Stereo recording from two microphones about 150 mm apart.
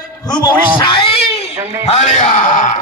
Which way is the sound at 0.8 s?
35° left (ahead or behind).